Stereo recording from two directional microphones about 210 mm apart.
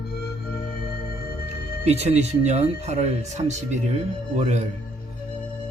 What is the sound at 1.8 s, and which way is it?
Speech, 30° right (ahead or behind).